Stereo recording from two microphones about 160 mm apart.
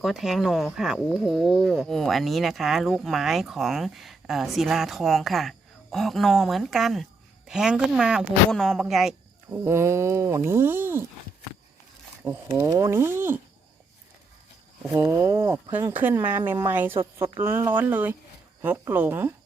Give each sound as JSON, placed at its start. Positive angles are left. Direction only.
{"t": 0.0, "sound": "speech", "side_deg": 0}
{"t": 9.6, "sound": "speech", "side_deg": -15}
{"t": 12.2, "sound": "speech", "side_deg": -15}
{"t": 14.9, "sound": "speech", "side_deg": -15}